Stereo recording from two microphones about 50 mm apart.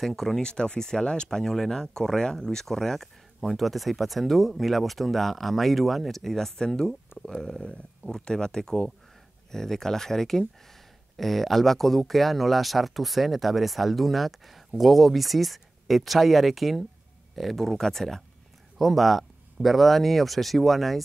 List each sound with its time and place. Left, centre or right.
0.0 s speech: centre
0.4 s speech: centre
7.1 s speech: left
8.0 s speech: centre